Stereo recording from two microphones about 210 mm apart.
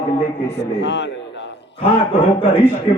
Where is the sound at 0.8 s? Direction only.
55° left (ahead or behind).